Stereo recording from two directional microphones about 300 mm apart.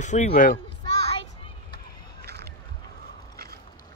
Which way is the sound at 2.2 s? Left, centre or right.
Right.